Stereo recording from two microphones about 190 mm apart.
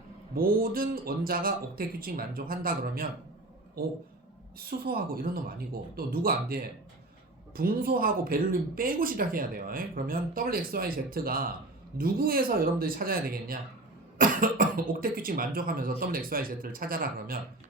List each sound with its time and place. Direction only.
0.3 s speech: 50° right (ahead or behind)